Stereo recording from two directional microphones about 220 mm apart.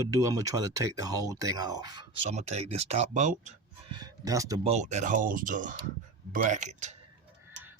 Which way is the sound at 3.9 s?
20° right (ahead or behind).